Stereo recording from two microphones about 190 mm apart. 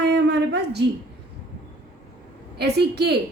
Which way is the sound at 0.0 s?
60° right (ahead or behind).